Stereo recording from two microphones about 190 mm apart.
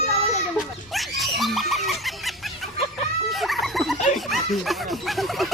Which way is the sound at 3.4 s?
Centre (ahead or behind).